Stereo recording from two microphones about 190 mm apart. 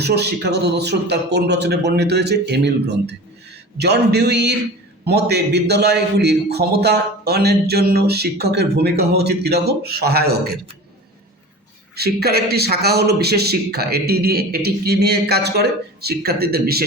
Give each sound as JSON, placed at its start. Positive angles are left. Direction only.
{"t": 0.0, "sound": "a man's voice", "side_deg": -60}
{"t": 11.9, "sound": "a man's voice", "side_deg": -55}